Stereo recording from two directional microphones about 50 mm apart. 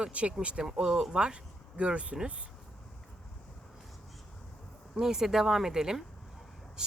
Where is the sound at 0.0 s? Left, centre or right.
Right.